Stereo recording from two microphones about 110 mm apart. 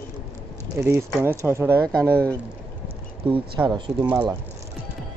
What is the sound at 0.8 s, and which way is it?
Speech, 25° right (ahead or behind).